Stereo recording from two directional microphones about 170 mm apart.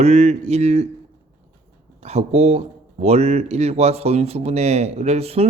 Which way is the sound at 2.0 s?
40° right (ahead or behind).